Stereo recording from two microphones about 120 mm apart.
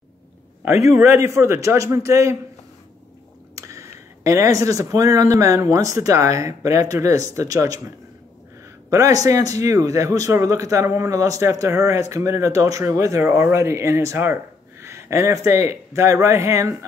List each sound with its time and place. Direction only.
0.8 s speech: 25° right (ahead or behind)
3.5 s speech: 25° right (ahead or behind)
8.9 s speech: 30° right (ahead or behind)